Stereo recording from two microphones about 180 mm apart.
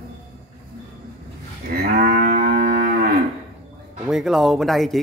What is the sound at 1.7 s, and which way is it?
Moo, 55° right (ahead or behind).